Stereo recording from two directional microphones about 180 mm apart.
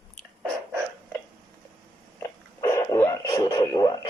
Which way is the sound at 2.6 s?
15° left (ahead or behind).